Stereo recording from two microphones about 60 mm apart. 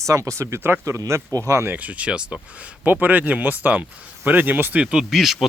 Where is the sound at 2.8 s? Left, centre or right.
Right.